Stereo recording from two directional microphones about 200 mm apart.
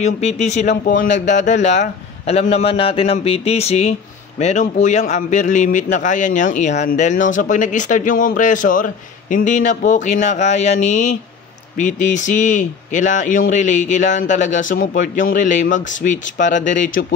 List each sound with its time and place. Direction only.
0.0 s a man's voice: 35° left (ahead or behind)
1.0 s speech: 60° left (ahead or behind)
1.3 s a man's voice: 35° left (ahead or behind)